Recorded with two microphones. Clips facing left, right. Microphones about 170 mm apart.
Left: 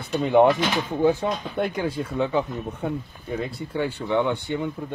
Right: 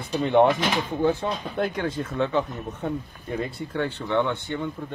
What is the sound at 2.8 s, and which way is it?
Speech, centre (ahead or behind).